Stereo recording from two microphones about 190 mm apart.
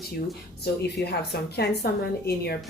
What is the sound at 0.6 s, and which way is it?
A woman's voice, 60° left (ahead or behind).